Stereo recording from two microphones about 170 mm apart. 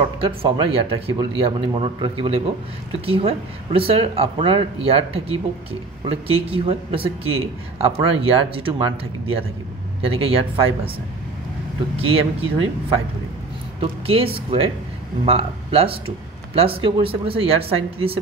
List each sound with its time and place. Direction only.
0.2 s speech: 30° right (ahead or behind)
10.0 s speech: 35° right (ahead or behind)
12.0 s speech: 35° right (ahead or behind)
13.7 s speech: 35° right (ahead or behind)